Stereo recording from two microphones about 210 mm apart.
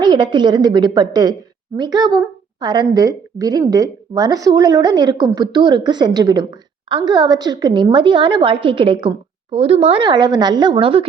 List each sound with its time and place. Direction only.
0.0 s a woman's voice: 20° right (ahead or behind)